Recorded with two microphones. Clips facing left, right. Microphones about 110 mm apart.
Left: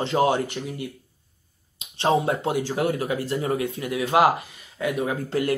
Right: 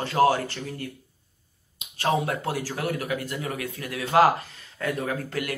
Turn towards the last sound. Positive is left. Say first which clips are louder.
# left 7 dB
turn(degrees=25)  # may be behind; listen again after turning